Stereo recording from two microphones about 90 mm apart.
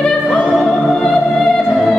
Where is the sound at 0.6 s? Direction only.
5° left (ahead or behind).